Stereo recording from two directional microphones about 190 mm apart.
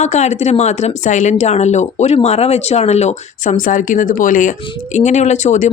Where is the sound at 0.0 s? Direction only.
35° left (ahead or behind).